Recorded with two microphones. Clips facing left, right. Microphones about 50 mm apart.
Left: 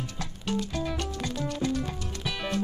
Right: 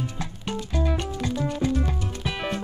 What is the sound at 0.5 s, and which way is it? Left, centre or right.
Music, centre.